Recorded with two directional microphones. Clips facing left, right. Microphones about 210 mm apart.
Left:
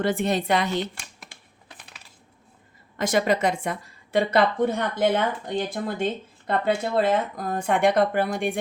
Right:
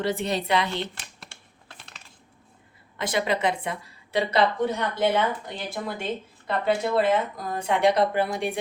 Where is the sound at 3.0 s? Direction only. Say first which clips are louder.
Left 3 dB; 45° left (ahead or behind).